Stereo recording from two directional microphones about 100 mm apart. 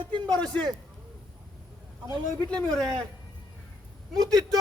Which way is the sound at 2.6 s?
5° left (ahead or behind).